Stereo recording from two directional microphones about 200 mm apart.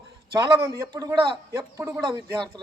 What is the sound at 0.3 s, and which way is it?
A man's voice, 15° right (ahead or behind).